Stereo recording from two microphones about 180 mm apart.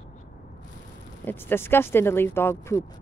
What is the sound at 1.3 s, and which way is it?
Speech, 10° left (ahead or behind).